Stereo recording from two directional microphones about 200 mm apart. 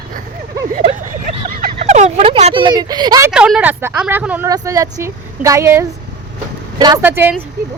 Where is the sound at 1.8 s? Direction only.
35° right (ahead or behind); by 3.3 s 20° right (ahead or behind).